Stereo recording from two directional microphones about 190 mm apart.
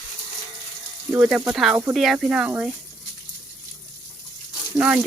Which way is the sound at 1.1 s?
5° right (ahead or behind).